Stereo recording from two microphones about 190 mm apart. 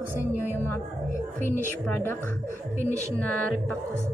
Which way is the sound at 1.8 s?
10° left (ahead or behind).